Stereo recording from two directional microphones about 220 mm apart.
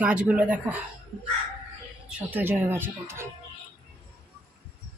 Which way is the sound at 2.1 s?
10° right (ahead or behind).